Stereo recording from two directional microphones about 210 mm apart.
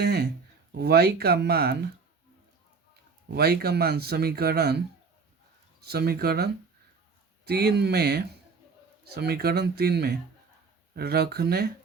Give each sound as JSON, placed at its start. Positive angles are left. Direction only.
{"t": 0.0, "sound": "a sound", "side_deg": -50}
{"t": 0.8, "sound": "speech", "side_deg": -50}
{"t": 3.2, "sound": "speech", "side_deg": -50}
{"t": 5.8, "sound": "speech", "side_deg": -50}